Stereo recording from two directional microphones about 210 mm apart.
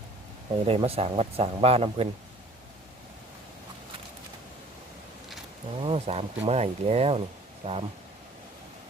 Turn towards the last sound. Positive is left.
turn(degrees=-30)  # may be behind; listen again after turning